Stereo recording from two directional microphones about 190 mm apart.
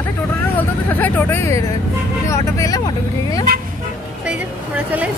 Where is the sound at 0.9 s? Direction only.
10° left (ahead or behind).